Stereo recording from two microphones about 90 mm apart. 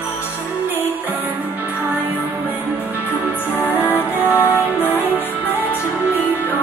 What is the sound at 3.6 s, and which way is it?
Music, 20° left (ahead or behind).